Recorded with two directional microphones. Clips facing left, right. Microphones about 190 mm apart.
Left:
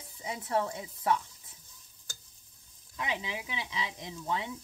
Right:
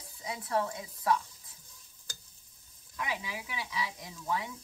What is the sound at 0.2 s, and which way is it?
Speech, 25° left (ahead or behind).